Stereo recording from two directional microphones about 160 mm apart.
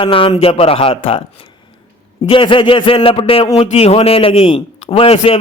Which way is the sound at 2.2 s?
35° left (ahead or behind).